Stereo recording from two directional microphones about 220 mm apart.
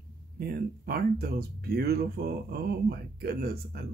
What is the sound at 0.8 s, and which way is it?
Speech, 45° right (ahead or behind).